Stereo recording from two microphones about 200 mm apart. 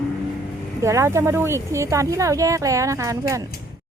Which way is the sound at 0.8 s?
15° right (ahead or behind).